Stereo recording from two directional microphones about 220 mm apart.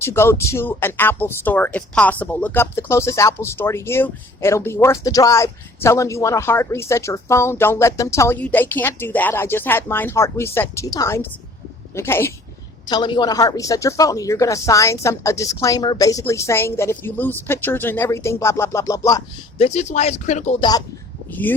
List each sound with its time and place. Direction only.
0.0 s speech: 10° left (ahead or behind)
19.6 s speech: 30° left (ahead or behind)
21.2 s speech: 10° left (ahead or behind)